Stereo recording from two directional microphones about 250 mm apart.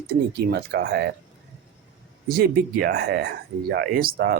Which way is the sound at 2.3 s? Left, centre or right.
Right.